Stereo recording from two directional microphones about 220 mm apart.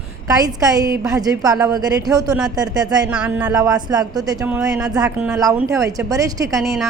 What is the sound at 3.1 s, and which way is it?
Speech, 5° right (ahead or behind).